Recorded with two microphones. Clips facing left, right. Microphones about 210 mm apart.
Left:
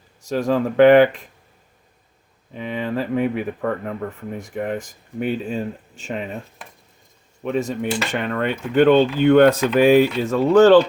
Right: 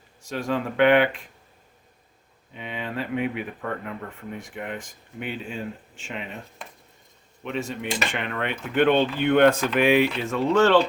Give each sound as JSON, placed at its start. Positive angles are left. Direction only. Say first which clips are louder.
{"t": 0.3, "sound": "speech", "louder": "left 7 dB", "side_deg": 40}
{"t": 2.5, "sound": "speech", "louder": "left 8 dB", "side_deg": 40}
{"t": 7.4, "sound": "speech", "louder": "left 7 dB", "side_deg": 40}